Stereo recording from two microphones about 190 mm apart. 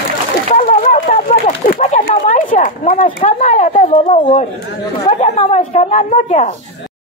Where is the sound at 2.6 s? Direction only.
40° left (ahead or behind).